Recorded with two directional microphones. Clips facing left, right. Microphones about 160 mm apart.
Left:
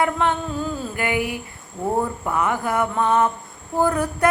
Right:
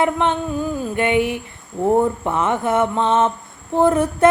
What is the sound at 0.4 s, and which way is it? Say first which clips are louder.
Speech: right 4 dB; 15° right (ahead or behind).